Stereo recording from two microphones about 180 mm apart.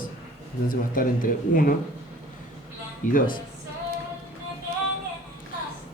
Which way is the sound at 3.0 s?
45° left (ahead or behind).